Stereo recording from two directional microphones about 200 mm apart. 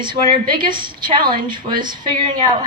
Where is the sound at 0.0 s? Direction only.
25° right (ahead or behind).